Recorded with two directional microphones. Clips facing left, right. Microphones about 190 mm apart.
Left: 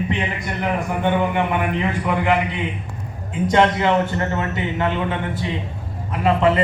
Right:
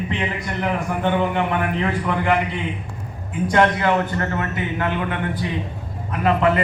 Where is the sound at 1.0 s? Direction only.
15° left (ahead or behind).